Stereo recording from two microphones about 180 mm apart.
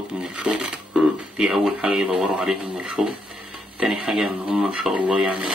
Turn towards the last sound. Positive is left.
turn(degrees=-5)  # may be behind; listen again after turning